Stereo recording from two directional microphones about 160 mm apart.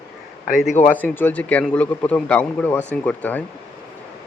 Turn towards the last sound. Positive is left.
turn(degrees=10)  # may be behind; listen again after turning